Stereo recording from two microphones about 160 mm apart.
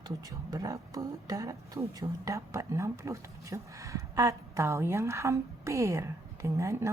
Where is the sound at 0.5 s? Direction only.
20° right (ahead or behind).